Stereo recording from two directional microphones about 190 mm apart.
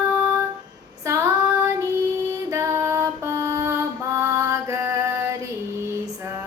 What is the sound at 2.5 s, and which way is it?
Music, 15° right (ahead or behind).